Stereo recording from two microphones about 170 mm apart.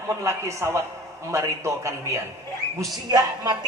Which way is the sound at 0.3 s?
15° right (ahead or behind).